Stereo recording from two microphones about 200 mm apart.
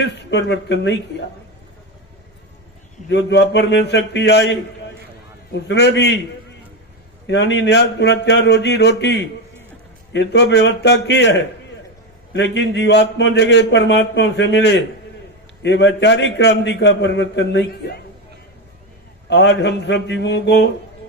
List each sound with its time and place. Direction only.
0.0 s a man's voice: 60° left (ahead or behind)
3.1 s a man's voice: 60° left (ahead or behind)
5.6 s a man's voice: 60° left (ahead or behind)
7.3 s a man's voice: 60° left (ahead or behind)
19.3 s a man's voice: 55° left (ahead or behind)